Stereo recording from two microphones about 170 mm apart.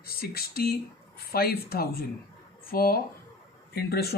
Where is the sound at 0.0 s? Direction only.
65° left (ahead or behind).